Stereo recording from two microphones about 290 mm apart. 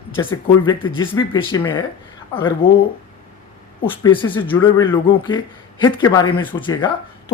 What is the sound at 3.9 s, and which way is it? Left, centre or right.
Speech, centre.